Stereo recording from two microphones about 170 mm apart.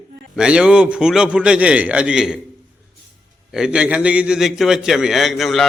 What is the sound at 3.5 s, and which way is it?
A man's voice, 5° right (ahead or behind).